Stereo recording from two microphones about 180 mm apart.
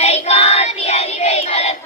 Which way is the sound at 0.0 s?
35° left (ahead or behind).